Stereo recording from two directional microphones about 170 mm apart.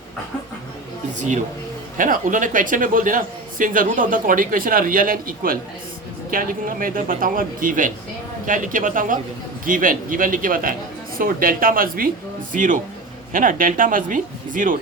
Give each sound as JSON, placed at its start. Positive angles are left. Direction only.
{"t": 2.0, "sound": "a man's voice", "side_deg": -50}